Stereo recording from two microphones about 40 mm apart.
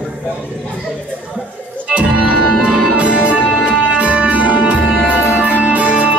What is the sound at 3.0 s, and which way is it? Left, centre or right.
Music, right.